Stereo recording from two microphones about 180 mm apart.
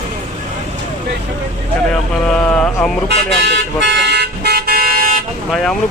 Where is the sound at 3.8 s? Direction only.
70° right (ahead or behind); by 5.2 s 50° right (ahead or behind).